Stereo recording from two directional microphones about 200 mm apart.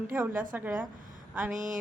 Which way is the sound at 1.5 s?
40° right (ahead or behind).